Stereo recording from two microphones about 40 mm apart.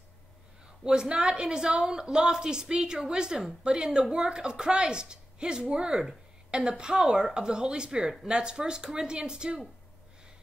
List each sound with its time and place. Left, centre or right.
0.8 s a woman's voice: right